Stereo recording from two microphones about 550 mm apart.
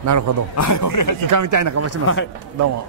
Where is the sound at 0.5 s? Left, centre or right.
Left.